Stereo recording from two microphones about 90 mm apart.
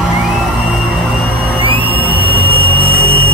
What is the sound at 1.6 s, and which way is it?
Music, 85° right.